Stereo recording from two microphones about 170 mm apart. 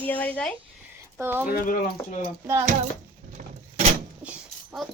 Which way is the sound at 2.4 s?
15° right (ahead or behind).